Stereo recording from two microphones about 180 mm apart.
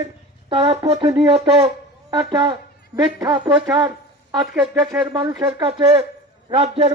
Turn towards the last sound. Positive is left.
turn(degrees=-35)  # may be behind; listen again after turning